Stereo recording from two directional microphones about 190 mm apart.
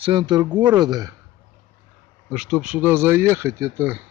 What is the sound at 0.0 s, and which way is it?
Speech, 25° right (ahead or behind).